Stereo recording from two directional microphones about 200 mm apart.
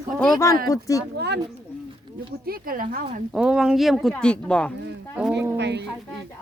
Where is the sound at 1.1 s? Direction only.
55° right (ahead or behind).